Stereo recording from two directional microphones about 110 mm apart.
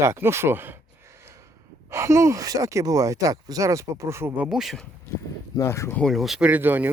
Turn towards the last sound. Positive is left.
turn(degrees=-15)  # may be behind; listen again after turning